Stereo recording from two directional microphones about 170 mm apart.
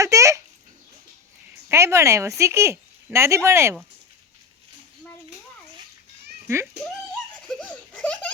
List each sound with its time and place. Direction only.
0.0 s a sound: 20° right (ahead or behind)
1.7 s speech: 15° right (ahead or behind)
7.4 s baby laughter: 5° left (ahead or behind)